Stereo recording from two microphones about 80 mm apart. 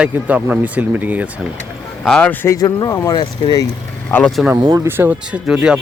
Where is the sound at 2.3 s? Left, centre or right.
Left.